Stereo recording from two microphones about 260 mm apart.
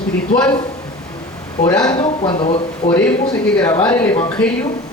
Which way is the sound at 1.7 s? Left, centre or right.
Centre.